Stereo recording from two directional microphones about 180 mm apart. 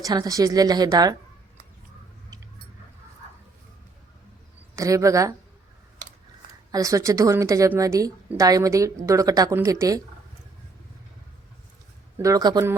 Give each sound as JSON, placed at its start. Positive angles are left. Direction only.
{"t": 0.0, "sound": "a woman's voice", "side_deg": -20}
{"t": 4.7, "sound": "speech", "side_deg": -15}
{"t": 6.0, "sound": "a sound", "side_deg": -45}
{"t": 6.7, "sound": "a woman's voice", "side_deg": -20}
{"t": 12.1, "sound": "a woman's voice", "side_deg": -20}